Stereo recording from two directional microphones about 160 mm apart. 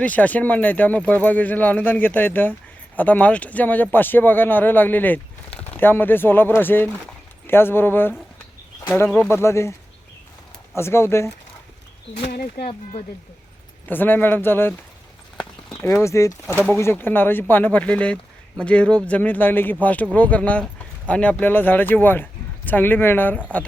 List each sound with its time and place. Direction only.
0.0 s speech: 10° left (ahead or behind)
10.8 s speech: 15° left (ahead or behind)
12.3 s speech: 80° left
13.8 s speech: 10° left (ahead or behind)
15.8 s speech: 15° left (ahead or behind)